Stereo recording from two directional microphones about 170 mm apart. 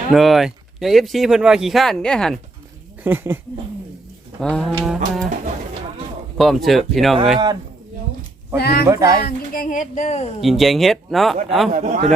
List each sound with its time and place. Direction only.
0.1 s speech: centre (ahead or behind)
3.0 s speech: 15° right (ahead or behind)
4.4 s speech: 5° left (ahead or behind)
6.3 s speech: centre (ahead or behind)
7.3 s speech: 20° right (ahead or behind)
8.5 s speech: 70° left (ahead or behind)
8.9 s speech: 20° right (ahead or behind)
9.2 s speech: 55° left (ahead or behind)
10.4 s speech: centre (ahead or behind)
11.7 s speech: 45° right (ahead or behind)